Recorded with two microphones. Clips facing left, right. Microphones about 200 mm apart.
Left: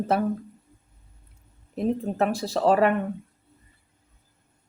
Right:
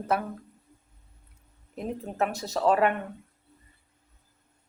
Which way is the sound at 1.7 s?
30° left (ahead or behind).